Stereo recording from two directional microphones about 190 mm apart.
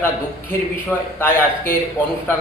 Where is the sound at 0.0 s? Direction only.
10° left (ahead or behind).